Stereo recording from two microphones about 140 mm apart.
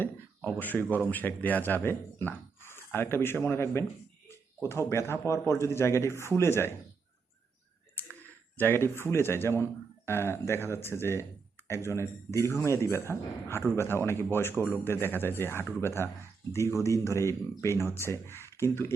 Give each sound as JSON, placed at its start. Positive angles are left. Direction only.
{"t": 0.6, "sound": "speech", "side_deg": 15}
{"t": 8.0, "sound": "clicking", "side_deg": 15}
{"t": 8.5, "sound": "speech", "side_deg": 15}